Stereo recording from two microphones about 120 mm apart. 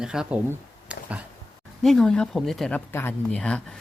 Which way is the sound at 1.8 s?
5° left (ahead or behind).